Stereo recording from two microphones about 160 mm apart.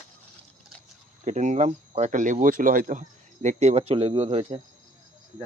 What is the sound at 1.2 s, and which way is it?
Speech, 45° right (ahead or behind).